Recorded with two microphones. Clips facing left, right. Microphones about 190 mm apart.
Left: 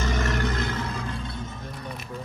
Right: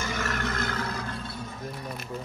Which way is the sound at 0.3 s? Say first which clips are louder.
Left 4 dB; 35° left (ahead or behind).